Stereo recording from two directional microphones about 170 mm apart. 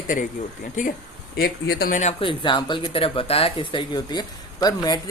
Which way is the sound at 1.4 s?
65° left (ahead or behind).